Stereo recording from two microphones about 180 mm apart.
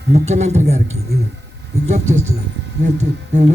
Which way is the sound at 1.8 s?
40° right (ahead or behind).